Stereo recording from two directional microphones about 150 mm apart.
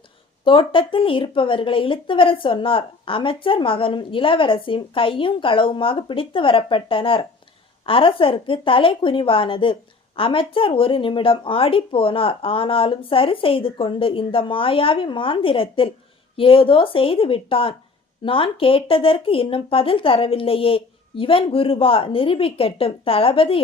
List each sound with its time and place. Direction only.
0.4 s a woman's voice: 35° left (ahead or behind)